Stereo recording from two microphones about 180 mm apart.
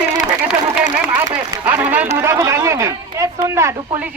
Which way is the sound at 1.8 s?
10° right (ahead or behind).